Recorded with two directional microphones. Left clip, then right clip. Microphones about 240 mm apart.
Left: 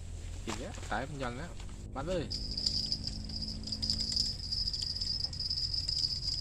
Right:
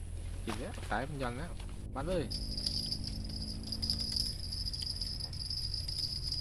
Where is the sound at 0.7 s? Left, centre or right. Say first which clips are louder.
Right 1 dB; centre.